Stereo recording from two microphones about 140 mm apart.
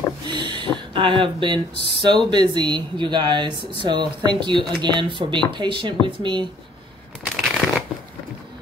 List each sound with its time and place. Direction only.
0.3 s a sound: 35° right (ahead or behind)
0.7 s speech: 35° right (ahead or behind)
7.2 s shuffling cards: 5° right (ahead or behind)